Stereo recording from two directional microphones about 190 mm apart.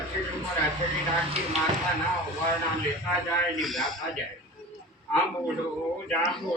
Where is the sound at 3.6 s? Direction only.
Centre (ahead or behind).